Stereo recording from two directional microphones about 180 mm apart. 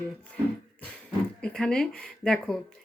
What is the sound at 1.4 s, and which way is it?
Speech, 5° left (ahead or behind).